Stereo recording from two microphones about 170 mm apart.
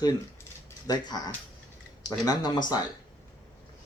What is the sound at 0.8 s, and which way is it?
Speech, 25° left (ahead or behind).